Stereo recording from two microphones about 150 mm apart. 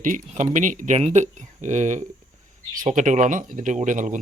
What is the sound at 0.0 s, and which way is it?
Speech, 60° right (ahead or behind).